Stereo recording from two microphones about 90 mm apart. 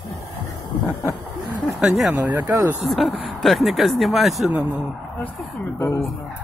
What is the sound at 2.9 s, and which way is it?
Speech, centre (ahead or behind).